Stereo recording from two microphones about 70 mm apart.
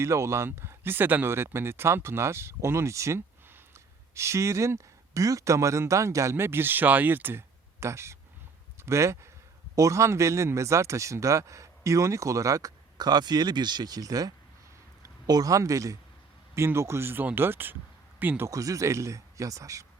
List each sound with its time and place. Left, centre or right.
0.0 s speech: right
6.3 s speech: right
7.8 s speech: right
13.0 s speech: right
16.6 s speech: right
18.4 s speech: right